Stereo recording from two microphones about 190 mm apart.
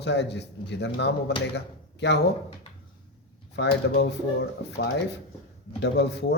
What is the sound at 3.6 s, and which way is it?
Speech, 60° left (ahead or behind).